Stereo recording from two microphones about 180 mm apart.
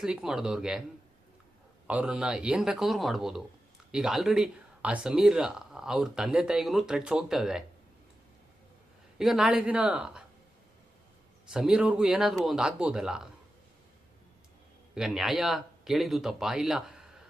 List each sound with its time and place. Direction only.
0.0 s speech: 5° right (ahead or behind)
1.9 s speech: 5° right (ahead or behind)
9.1 s speech: centre (ahead or behind)
11.4 s speech: 5° right (ahead or behind)
14.9 s speech: 5° right (ahead or behind)